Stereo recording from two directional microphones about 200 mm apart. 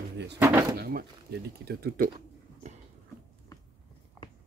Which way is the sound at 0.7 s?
50° right (ahead or behind).